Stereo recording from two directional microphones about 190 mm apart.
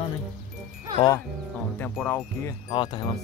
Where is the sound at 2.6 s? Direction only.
30° left (ahead or behind).